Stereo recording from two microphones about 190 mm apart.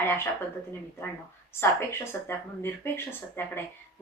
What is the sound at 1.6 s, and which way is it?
Speech, 15° left (ahead or behind).